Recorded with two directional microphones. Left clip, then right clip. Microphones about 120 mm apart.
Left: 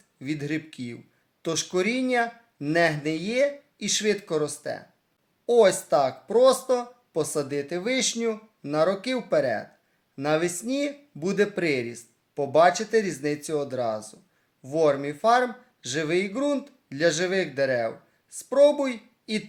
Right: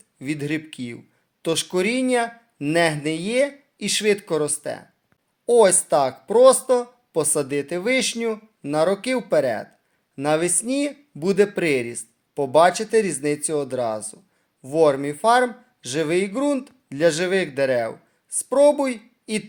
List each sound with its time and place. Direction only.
0.2 s speech: 30° right (ahead or behind)